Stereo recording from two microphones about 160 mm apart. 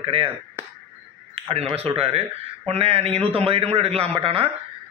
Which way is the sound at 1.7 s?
40° right (ahead or behind).